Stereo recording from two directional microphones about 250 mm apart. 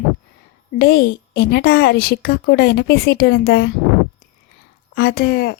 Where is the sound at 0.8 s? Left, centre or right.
Left.